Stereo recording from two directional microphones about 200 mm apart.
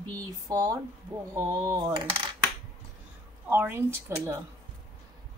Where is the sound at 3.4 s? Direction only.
10° right (ahead or behind).